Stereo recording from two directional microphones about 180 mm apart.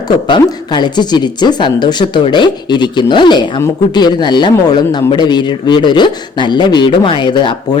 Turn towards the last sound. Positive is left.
turn(degrees=25)  # may be behind; listen again after turning